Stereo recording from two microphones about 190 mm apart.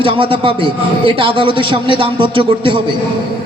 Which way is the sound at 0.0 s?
30° right (ahead or behind).